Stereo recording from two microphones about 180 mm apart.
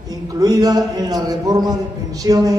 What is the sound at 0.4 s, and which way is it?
A man's voice, 20° right (ahead or behind).